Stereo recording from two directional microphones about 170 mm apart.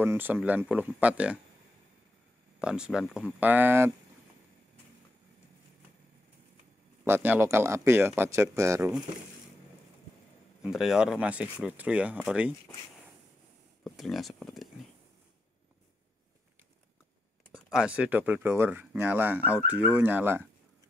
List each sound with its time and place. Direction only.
0.0 s speech: 10° right (ahead or behind)
2.6 s speech: 5° right (ahead or behind)
7.1 s speech: 10° right (ahead or behind)
10.6 s speech: centre (ahead or behind)
13.8 s speech: centre (ahead or behind)
17.6 s speech: 5° right (ahead or behind)